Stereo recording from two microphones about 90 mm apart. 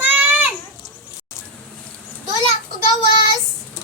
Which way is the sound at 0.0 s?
20° right (ahead or behind).